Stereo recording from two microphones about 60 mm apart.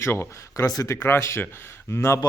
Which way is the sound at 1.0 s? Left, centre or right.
Left.